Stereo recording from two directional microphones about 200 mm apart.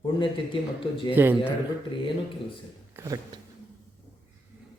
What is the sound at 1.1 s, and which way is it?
Speech, 10° right (ahead or behind).